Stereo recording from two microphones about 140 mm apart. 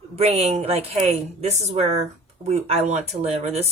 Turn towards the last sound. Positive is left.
turn(degrees=-50)  # may be behind; listen again after turning